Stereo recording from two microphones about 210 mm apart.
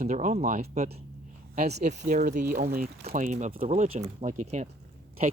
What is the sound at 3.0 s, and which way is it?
Speech, 30° right (ahead or behind).